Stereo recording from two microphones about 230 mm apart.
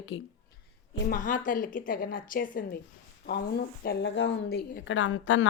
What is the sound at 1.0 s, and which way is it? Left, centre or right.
A woman's voice, left.